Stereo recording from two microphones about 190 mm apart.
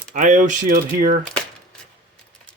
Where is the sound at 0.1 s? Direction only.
40° right (ahead or behind).